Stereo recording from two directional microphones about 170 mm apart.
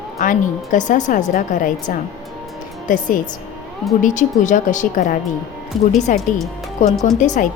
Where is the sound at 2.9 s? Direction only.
50° left (ahead or behind).